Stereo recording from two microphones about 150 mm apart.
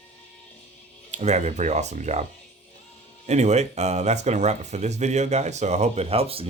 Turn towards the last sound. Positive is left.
turn(degrees=-40)  # may be behind; listen again after turning